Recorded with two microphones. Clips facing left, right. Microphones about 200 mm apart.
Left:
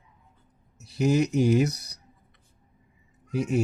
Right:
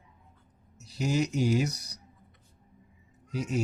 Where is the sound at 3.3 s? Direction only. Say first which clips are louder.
Left 5 dB; 55° left (ahead or behind).